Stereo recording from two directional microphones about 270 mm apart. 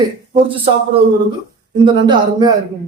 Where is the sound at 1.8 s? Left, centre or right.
Centre.